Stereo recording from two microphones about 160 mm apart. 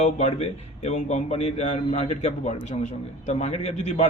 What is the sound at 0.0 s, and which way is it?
A man's voice, 45° left (ahead or behind).